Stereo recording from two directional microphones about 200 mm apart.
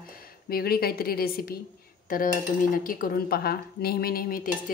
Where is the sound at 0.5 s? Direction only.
50° left (ahead or behind).